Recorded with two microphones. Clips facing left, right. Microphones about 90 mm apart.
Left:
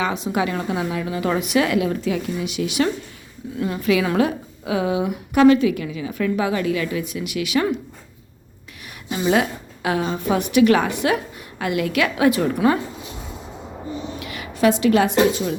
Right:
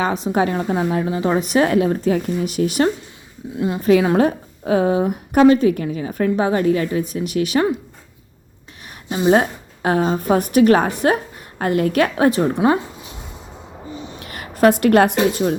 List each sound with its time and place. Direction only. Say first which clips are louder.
0.0 s a woman's voice: right 3 dB; 40° right (ahead or behind)
3.5 s speech: right 3 dB; 25° right (ahead or behind)
3.8 s a woman's voice: right 5 dB; 35° right (ahead or behind)
9.0 s a woman's voice: right 4 dB; 35° right (ahead or behind)
14.2 s a woman's voice: right 5 dB; 45° right (ahead or behind)